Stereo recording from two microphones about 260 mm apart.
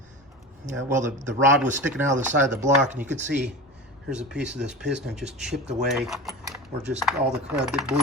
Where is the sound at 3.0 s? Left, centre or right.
Centre.